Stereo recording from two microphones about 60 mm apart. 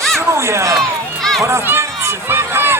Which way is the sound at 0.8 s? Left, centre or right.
Centre.